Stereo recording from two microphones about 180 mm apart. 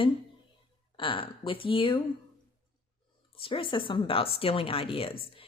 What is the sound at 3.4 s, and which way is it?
Speech, 30° left (ahead or behind).